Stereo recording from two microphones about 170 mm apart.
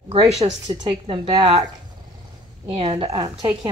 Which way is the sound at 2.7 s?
35° right (ahead or behind).